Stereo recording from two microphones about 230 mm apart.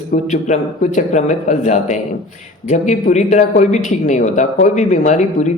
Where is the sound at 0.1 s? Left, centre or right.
Left.